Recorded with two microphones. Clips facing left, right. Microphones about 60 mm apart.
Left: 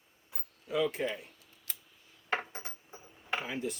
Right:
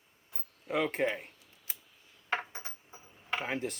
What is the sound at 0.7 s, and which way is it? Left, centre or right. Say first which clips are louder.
Speech: right 1 dB; right.